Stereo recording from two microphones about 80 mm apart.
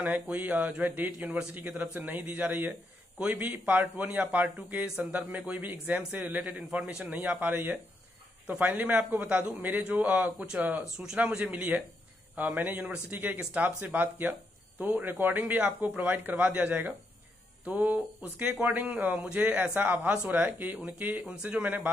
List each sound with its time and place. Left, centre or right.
0.0 s speech: centre
4.8 s speech: centre
5.5 s speech: right
6.8 s speech: centre
7.1 s speech: right